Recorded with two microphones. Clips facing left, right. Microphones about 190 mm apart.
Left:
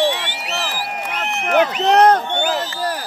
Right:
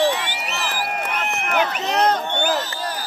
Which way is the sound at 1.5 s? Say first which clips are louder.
Left 8 dB; 60° left (ahead or behind).